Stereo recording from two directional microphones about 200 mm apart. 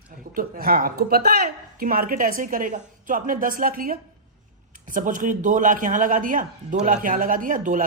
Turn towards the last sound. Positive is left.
turn(degrees=-40)  # may be behind; listen again after turning